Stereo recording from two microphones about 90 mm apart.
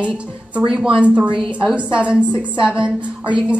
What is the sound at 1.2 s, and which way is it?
Speech, 70° right (ahead or behind).